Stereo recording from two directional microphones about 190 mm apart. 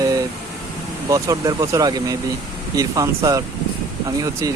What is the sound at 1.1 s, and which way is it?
Speech, 15° right (ahead or behind).